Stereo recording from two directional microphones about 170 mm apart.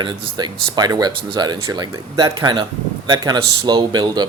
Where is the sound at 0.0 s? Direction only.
25° right (ahead or behind).